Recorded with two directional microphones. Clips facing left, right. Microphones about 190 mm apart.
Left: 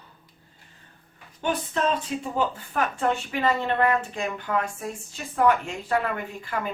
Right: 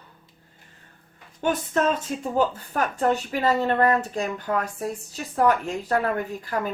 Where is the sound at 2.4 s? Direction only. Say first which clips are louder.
Right 3 dB; 40° right (ahead or behind).